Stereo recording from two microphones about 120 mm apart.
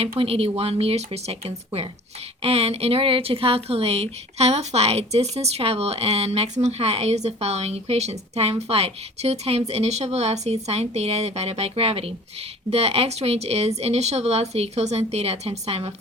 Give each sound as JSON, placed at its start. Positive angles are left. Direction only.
{"t": 0.2, "sound": "speech", "side_deg": -55}